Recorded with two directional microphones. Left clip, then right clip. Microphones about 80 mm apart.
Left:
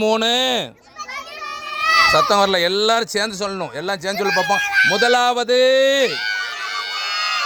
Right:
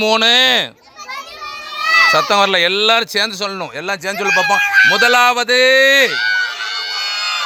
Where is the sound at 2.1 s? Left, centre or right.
Centre.